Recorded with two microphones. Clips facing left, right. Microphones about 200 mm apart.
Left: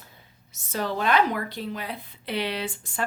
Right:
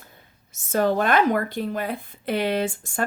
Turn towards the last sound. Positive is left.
turn(degrees=-45)  # may be behind; listen again after turning